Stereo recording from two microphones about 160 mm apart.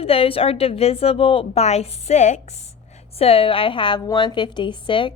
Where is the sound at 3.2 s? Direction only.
35° left (ahead or behind).